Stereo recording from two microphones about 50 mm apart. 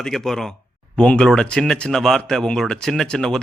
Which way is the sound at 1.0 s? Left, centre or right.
Centre.